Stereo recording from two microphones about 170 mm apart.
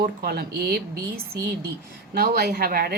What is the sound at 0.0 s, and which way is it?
Speech, 65° right (ahead or behind).